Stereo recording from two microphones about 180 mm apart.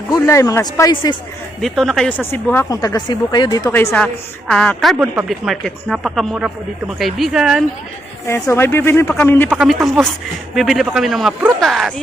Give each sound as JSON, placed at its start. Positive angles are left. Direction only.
{"t": 0.1, "sound": "speech", "side_deg": 20}
{"t": 1.6, "sound": "speech", "side_deg": 0}
{"t": 8.3, "sound": "speech", "side_deg": 15}
{"t": 9.5, "sound": "speech", "side_deg": -5}